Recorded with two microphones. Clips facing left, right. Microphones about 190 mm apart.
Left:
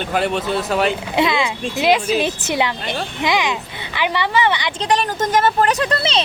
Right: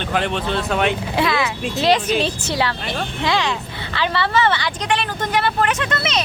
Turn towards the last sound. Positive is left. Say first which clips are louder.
# left 3 dB
turn(degrees=30)  # may be behind; listen again after turning